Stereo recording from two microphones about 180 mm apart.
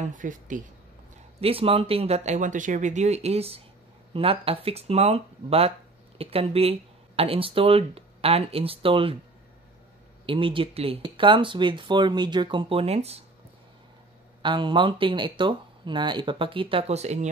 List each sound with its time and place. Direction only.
0.0 s speech: 45° right (ahead or behind)
1.4 s speech: 30° right (ahead or behind)
10.2 s speech: 30° right (ahead or behind)
14.4 s speech: 25° right (ahead or behind)